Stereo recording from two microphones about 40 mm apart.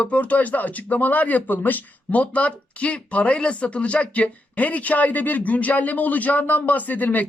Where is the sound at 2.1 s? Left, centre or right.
Left.